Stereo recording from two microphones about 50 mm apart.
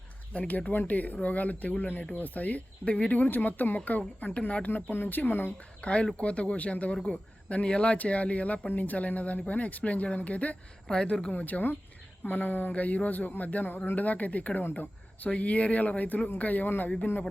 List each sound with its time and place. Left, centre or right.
0.3 s speech: left
5.8 s speech: left
10.8 s speech: centre
11.3 s speech: left